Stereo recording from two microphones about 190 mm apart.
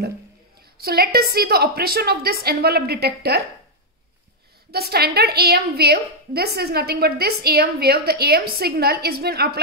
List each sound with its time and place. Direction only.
0.7 s a woman's voice: 55° right (ahead or behind)
4.6 s a woman's voice: 55° right (ahead or behind)